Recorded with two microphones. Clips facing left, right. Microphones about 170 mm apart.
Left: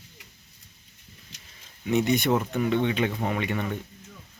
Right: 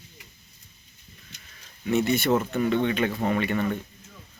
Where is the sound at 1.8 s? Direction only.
15° left (ahead or behind).